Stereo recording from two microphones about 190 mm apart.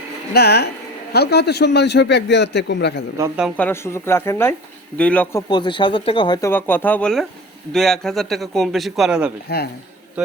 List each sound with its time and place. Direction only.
0.3 s a man's voice: 60° left (ahead or behind)
3.2 s a man's voice: 5° right (ahead or behind)
3.6 s speech: 15° left (ahead or behind)
5.5 s speech: 25° left (ahead or behind)
6.5 s a man's voice: 10° left (ahead or behind)